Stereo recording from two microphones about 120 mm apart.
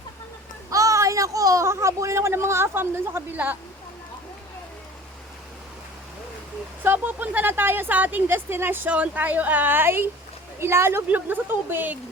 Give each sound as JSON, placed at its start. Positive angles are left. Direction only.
{"t": 0.7, "sound": "speech", "side_deg": -30}
{"t": 6.8, "sound": "a woman's voice", "side_deg": -15}